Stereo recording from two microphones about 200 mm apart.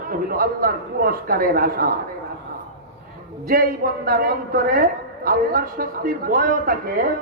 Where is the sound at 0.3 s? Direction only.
45° right (ahead or behind).